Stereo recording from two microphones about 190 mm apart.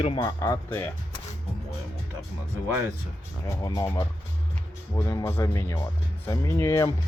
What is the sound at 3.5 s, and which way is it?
Speech, 20° left (ahead or behind).